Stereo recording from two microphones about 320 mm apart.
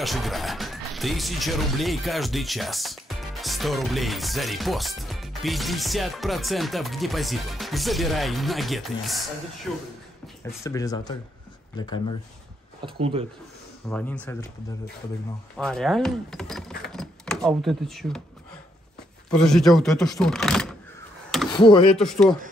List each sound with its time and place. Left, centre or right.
0.0 s speech: centre
12.8 s speech: centre
13.8 s speech: centre
15.5 s speech: centre
16.9 s a sound: centre
19.3 s speech: centre
21.5 s speech: centre
21.9 s speech: centre